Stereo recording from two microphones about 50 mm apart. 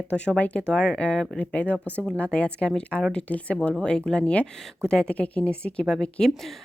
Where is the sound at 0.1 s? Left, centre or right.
Left.